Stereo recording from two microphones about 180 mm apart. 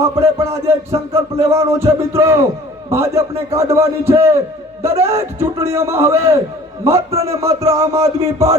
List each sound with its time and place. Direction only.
0.0 s music: 15° right (ahead or behind)